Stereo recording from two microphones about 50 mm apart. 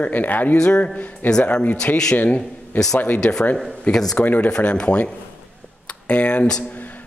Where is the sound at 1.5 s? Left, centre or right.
Left.